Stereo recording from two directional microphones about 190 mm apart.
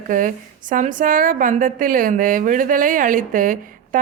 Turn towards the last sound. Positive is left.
turn(degrees=-45)  # may be behind; listen again after turning